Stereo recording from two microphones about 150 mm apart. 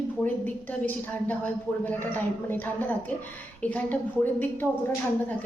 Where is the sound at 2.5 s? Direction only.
15° left (ahead or behind).